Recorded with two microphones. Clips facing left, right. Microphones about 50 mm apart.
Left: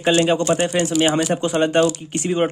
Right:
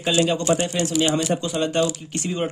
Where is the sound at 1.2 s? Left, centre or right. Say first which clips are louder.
Left 4 dB; left.